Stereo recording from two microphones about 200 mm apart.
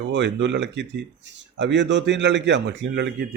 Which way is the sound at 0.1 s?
65° right (ahead or behind).